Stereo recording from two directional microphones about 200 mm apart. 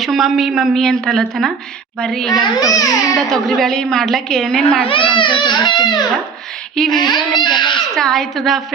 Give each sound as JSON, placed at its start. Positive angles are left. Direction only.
{"t": 0.0, "sound": "a woman's voice", "side_deg": 0}
{"t": 2.3, "sound": "a child's voice", "side_deg": 20}
{"t": 3.2, "sound": "a woman's voice", "side_deg": 0}
{"t": 4.8, "sound": "a child's voice", "side_deg": 25}
{"t": 6.7, "sound": "a woman's voice", "side_deg": 0}
{"t": 7.0, "sound": "a child's voice", "side_deg": 20}
{"t": 7.9, "sound": "a woman's voice", "side_deg": 0}